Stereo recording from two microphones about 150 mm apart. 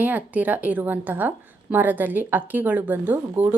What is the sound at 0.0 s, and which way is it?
A woman's voice, 10° right (ahead or behind).